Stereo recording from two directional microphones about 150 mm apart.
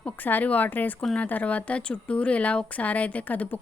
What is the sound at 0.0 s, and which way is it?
A woman's voice, 10° left (ahead or behind).